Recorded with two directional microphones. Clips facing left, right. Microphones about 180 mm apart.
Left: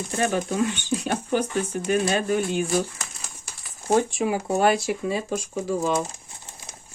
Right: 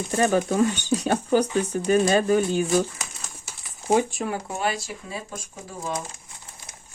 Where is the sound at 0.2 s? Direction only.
45° right (ahead or behind).